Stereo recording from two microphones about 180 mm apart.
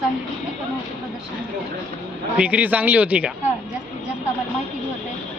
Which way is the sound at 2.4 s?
10° right (ahead or behind).